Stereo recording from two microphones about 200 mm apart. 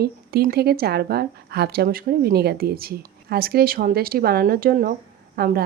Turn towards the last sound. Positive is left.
turn(degrees=-50)  # may be behind; listen again after turning